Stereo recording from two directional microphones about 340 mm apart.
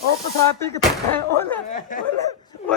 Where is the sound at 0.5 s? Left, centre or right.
Centre.